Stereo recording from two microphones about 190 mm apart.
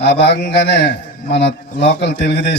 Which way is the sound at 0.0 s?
60° left (ahead or behind).